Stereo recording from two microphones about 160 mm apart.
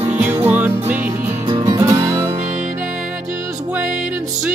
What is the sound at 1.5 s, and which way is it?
Music, 25° right (ahead or behind).